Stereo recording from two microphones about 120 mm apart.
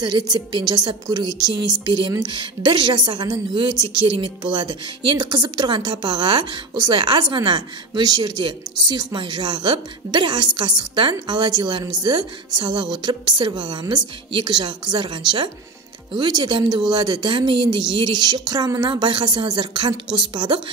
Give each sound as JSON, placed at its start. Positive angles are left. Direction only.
{"t": 0.0, "sound": "a woman's voice", "side_deg": -40}